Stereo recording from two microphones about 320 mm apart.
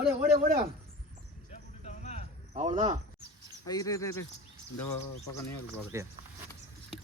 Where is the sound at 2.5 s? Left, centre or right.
Centre.